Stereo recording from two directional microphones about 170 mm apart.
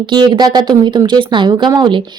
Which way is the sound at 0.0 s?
25° right (ahead or behind).